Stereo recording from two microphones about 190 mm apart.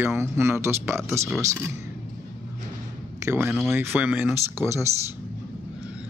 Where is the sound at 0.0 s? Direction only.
15° right (ahead or behind).